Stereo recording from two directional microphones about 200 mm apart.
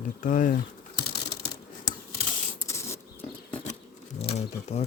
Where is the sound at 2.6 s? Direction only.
15° left (ahead or behind).